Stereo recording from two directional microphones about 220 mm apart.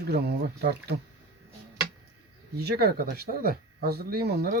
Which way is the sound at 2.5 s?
45° right (ahead or behind).